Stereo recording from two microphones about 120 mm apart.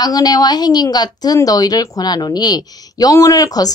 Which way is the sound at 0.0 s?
35° left (ahead or behind).